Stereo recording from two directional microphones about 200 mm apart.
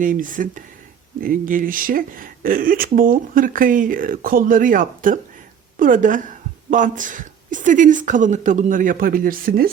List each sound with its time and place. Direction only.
0.0 s a woman's voice: 40° right (ahead or behind)